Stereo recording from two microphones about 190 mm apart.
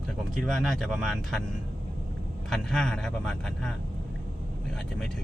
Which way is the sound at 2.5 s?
5° left (ahead or behind).